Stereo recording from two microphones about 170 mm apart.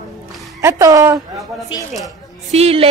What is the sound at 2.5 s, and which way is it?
Speech, 35° right (ahead or behind).